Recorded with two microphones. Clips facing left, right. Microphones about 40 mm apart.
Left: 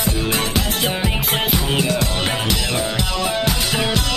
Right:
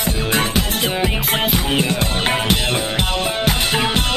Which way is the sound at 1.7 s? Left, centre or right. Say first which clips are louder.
Right 1 dB; right.